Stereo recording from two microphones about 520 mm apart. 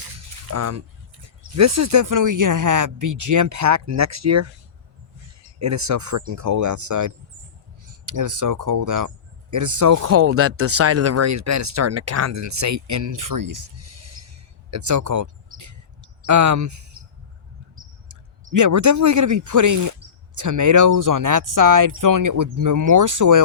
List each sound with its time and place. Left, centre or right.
0.5 s speech: right
5.5 s speech: right
15.5 s a sound: right
16.2 s speech: right
18.5 s speech: right